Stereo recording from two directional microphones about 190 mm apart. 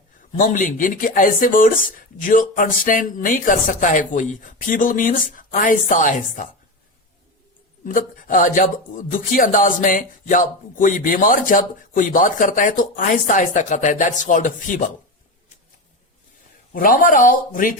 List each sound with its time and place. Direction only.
0.3 s speech: 45° left (ahead or behind)
7.9 s speech: 45° left (ahead or behind)
16.7 s speech: 50° left (ahead or behind)